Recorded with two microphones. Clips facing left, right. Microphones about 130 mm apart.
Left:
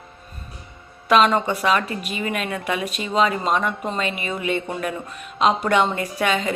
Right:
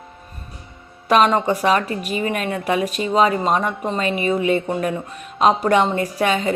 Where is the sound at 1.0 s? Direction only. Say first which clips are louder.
Right 1 dB; 35° right (ahead or behind).